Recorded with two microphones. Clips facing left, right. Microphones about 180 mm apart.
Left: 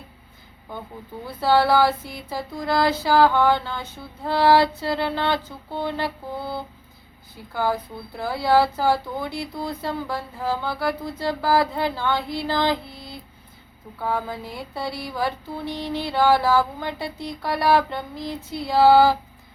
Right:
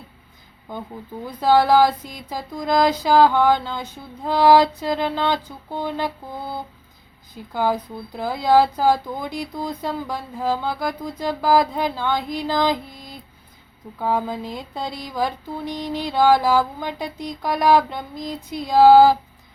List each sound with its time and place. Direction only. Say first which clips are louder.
1.4 s speech: right 3 dB; 15° right (ahead or behind)
7.5 s speech: right 2 dB; 15° right (ahead or behind)